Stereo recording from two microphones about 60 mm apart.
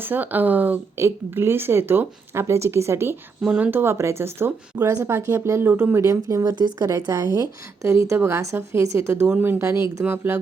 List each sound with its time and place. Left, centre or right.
0.0 s speech: right
0.9 s speech: right
3.9 s speech: right
6.1 s a woman's voice: right
9.4 s speech: right